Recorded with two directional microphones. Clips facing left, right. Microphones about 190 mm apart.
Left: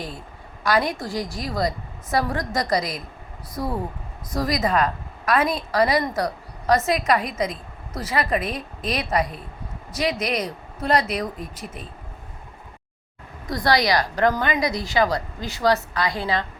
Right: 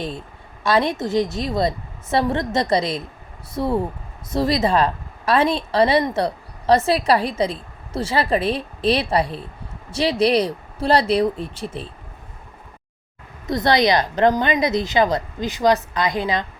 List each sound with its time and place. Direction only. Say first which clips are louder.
0.6 s speech: right 3 dB; 25° right (ahead or behind)
13.5 s speech: right 3 dB; 20° right (ahead or behind)